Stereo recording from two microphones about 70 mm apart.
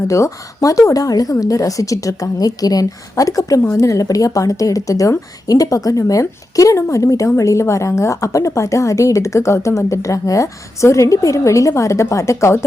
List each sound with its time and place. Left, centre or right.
0.1 s a woman's voice: left